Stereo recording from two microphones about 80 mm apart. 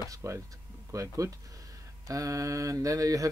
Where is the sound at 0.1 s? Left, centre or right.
Right.